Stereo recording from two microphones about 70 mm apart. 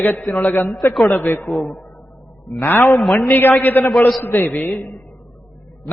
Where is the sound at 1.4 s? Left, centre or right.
Centre.